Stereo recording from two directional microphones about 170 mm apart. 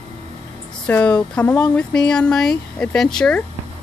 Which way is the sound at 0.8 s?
5° left (ahead or behind).